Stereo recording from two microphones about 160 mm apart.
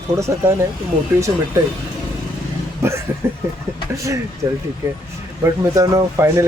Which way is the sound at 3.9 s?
20° right (ahead or behind).